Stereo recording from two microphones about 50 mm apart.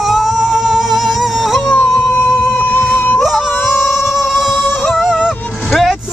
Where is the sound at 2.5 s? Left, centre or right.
Left.